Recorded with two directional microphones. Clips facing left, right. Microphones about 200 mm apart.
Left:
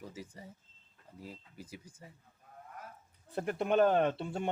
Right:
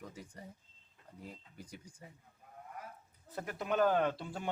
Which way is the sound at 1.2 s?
5° left (ahead or behind).